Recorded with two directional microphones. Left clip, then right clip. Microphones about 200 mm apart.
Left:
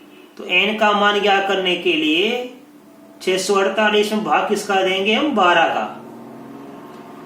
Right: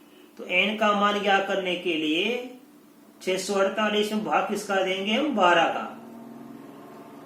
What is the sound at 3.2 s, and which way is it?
Speech, 15° right (ahead or behind).